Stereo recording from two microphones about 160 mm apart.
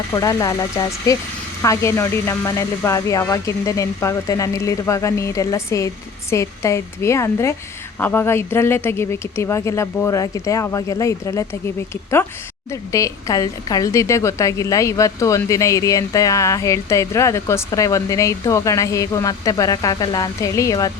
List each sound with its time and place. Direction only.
0.1 s a woman's voice: 20° left (ahead or behind)
12.7 s a woman's voice: 20° left (ahead or behind)